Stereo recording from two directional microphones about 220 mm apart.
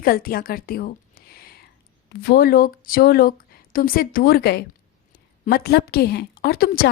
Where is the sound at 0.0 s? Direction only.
40° left (ahead or behind).